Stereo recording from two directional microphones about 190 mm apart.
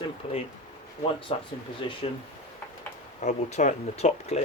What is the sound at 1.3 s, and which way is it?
Speech, 30° left (ahead or behind).